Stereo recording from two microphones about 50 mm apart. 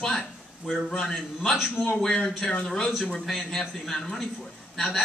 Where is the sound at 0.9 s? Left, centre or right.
Centre.